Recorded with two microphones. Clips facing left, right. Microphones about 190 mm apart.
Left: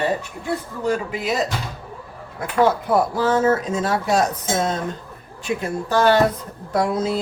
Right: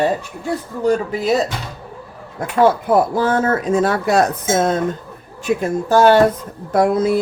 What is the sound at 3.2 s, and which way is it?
A woman's voice, 55° right (ahead or behind).